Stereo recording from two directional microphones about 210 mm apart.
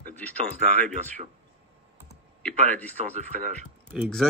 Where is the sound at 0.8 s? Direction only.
35° right (ahead or behind).